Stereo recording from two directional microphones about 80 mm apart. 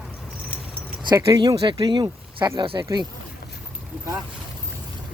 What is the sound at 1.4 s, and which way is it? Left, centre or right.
Speech, right.